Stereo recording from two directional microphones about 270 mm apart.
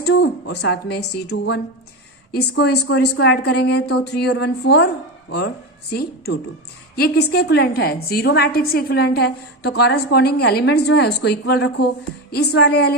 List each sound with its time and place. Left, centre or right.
0.0 s a woman's voice: left
5.9 s a woman's voice: left